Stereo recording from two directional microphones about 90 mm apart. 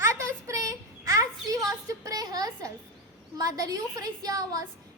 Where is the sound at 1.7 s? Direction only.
40° right (ahead or behind).